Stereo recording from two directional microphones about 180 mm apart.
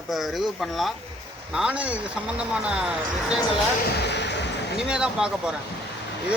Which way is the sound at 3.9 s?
70° left (ahead or behind).